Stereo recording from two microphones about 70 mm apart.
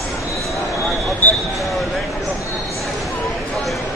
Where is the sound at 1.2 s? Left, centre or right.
Left.